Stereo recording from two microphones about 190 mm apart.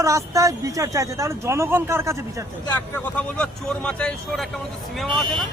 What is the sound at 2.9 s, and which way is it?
Speech, 5° left (ahead or behind).